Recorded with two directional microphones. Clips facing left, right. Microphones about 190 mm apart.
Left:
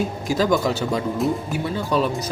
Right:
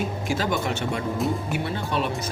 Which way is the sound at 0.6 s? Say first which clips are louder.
Left 4 dB; 35° left (ahead or behind).